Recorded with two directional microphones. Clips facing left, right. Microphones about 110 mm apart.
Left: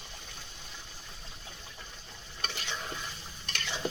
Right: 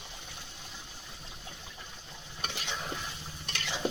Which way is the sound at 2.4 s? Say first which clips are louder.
Even; 15° right (ahead or behind).